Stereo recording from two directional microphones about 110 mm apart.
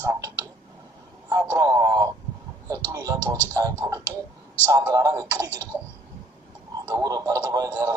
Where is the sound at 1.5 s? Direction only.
30° right (ahead or behind).